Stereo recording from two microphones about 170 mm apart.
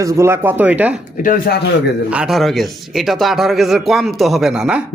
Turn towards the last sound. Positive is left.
turn(degrees=-5)  # may be behind; listen again after turning